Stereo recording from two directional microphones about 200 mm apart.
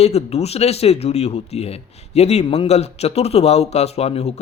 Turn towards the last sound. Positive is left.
turn(degrees=30)  # may be behind; listen again after turning